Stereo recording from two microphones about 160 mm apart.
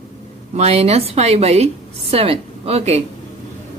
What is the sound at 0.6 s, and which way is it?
A woman's voice, 40° right (ahead or behind).